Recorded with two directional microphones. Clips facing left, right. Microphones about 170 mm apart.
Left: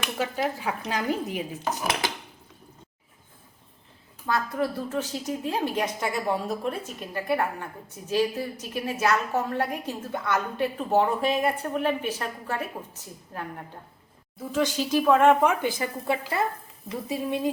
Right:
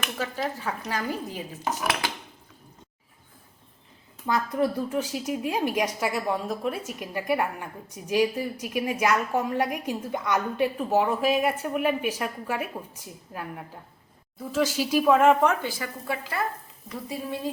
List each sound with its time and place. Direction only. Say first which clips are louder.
0.2 s speech: left 3 dB; 15° left (ahead or behind)
4.3 s a woman's voice: right 2 dB; 20° right (ahead or behind); by 15.4 s centre (ahead or behind)
15.4 s speech: left 1 dB; 20° left (ahead or behind)